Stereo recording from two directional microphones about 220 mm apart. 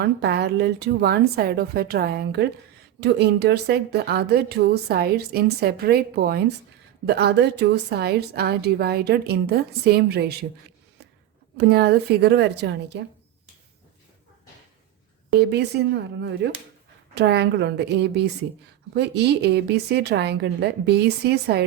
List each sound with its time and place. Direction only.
0.0 s a woman's voice: 50° right (ahead or behind)
11.5 s a woman's voice: 50° right (ahead or behind)
15.3 s a woman's voice: 50° right (ahead or behind)